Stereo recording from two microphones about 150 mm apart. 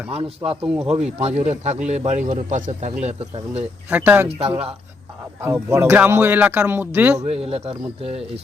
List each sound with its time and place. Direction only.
0.1 s speech: 40° right (ahead or behind)
3.8 s a man's voice: 10° right (ahead or behind)
4.4 s speech: 40° right (ahead or behind)
5.6 s a man's voice: 15° right (ahead or behind)
7.3 s speech: 40° right (ahead or behind)